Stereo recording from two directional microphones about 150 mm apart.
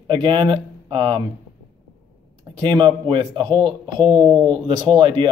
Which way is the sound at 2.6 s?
30° right (ahead or behind).